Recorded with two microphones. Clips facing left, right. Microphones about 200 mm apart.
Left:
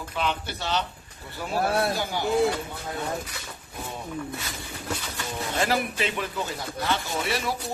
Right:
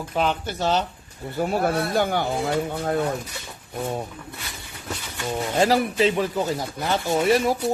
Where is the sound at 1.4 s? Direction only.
55° right (ahead or behind).